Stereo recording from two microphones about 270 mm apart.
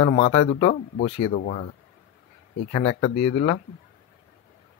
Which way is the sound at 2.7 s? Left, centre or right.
Left.